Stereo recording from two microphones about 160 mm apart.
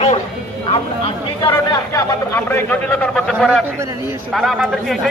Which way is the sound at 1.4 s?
25° left (ahead or behind).